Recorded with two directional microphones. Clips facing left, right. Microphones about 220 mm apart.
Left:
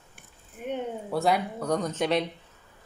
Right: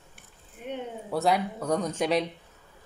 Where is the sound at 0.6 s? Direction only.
50° left (ahead or behind).